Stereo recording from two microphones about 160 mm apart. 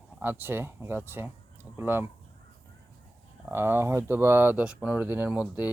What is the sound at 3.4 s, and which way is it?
Speech, 15° right (ahead or behind).